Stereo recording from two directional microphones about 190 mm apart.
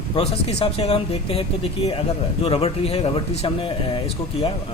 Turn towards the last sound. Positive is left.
turn(degrees=30)  # may be behind; listen again after turning